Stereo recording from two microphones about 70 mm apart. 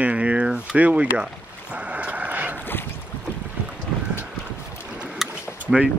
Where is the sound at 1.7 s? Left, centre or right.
Right.